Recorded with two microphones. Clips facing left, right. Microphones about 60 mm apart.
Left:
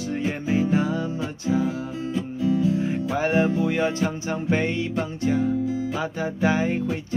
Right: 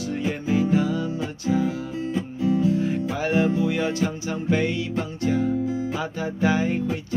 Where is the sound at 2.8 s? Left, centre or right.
Centre.